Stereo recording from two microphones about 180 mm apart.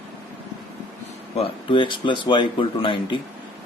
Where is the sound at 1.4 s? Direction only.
30° left (ahead or behind).